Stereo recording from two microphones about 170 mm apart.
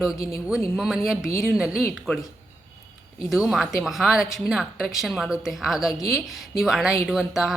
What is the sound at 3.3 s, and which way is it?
Speech, centre (ahead or behind).